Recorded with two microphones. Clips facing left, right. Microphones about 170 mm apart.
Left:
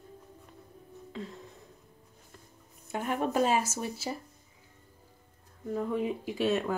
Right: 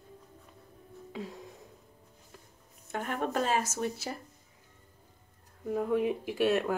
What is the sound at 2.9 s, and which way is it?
Speech, 10° left (ahead or behind).